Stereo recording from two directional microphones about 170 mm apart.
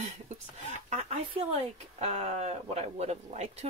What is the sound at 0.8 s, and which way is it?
Speech, 40° right (ahead or behind).